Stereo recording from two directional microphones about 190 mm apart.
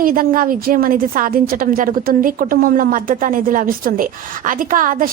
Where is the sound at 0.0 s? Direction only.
50° right (ahead or behind).